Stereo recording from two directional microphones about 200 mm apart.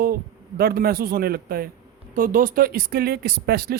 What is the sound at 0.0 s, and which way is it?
A man's voice, 50° right (ahead or behind).